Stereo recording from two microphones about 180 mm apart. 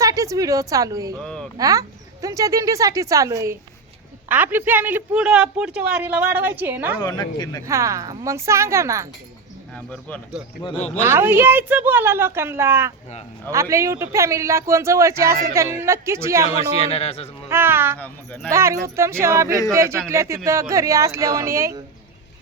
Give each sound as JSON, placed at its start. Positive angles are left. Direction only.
{"t": 0.0, "sound": "speech", "side_deg": -15}
{"t": 1.2, "sound": "speech", "side_deg": 5}
{"t": 1.5, "sound": "speech", "side_deg": -20}
{"t": 7.0, "sound": "speech", "side_deg": 25}
{"t": 7.6, "sound": "speech", "side_deg": -15}
{"t": 9.7, "sound": "speech", "side_deg": 5}
{"t": 10.6, "sound": "speech", "side_deg": 30}
{"t": 11.0, "sound": "speech", "side_deg": -10}
{"t": 16.7, "sound": "speech", "side_deg": 35}
{"t": 17.5, "sound": "speech", "side_deg": -10}